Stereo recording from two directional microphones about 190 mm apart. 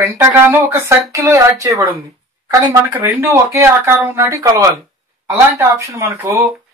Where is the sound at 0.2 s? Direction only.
15° right (ahead or behind).